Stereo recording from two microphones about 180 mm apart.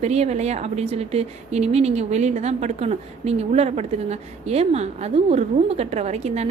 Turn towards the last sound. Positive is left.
turn(degrees=-35)  # may be behind; listen again after turning